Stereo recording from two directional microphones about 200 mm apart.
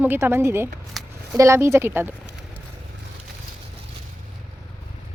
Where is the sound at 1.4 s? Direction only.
15° right (ahead or behind).